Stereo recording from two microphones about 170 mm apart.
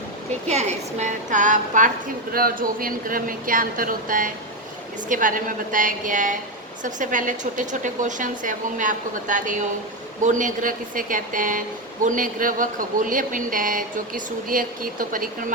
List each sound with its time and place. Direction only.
0.4 s a man's voice: 40° right (ahead or behind)